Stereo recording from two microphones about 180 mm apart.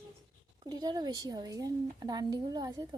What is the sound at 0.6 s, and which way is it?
Speech, 20° right (ahead or behind).